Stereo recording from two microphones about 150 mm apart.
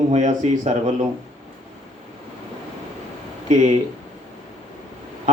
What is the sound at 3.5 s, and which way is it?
Speech, 55° right (ahead or behind).